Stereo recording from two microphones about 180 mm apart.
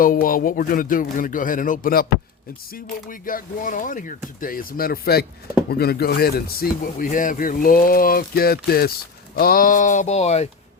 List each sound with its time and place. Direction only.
0.0 s speech: 50° left (ahead or behind)